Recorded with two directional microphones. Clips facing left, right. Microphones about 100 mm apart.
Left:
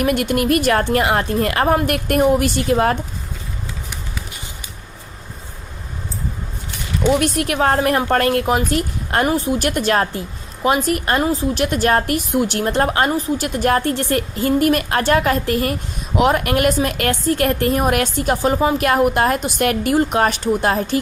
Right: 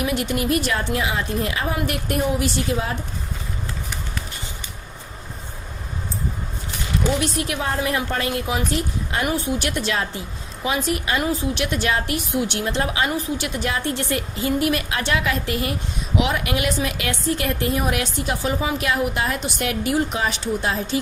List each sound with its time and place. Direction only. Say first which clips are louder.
0.0 s a woman's voice: left 5 dB; 55° left (ahead or behind)
7.1 s a woman's voice: left 9 dB; 60° left (ahead or behind)
11.2 s a woman's voice: left 5 dB; 35° left (ahead or behind); by 13.1 s 50° left (ahead or behind)
13.1 s a woman's voice: left 5 dB; 35° left (ahead or behind)
13.6 s a woman's voice: left 10 dB; 50° left (ahead or behind)